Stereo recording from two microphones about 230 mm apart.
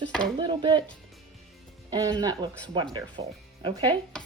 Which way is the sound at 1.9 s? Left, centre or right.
Centre.